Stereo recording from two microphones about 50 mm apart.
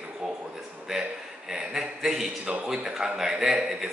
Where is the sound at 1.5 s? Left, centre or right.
Centre.